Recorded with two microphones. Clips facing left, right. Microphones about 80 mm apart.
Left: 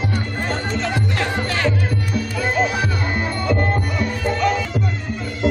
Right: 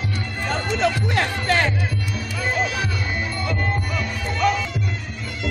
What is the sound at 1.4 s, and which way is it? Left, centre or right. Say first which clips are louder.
Music: right 3 dB; right.